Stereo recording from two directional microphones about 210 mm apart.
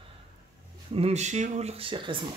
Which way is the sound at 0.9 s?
30° right (ahead or behind).